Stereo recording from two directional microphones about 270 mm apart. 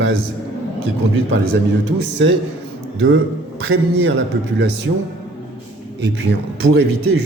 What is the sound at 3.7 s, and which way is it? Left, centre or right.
A man's voice, right.